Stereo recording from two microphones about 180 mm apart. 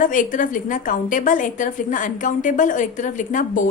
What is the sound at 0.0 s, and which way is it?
A woman's voice, 45° left (ahead or behind).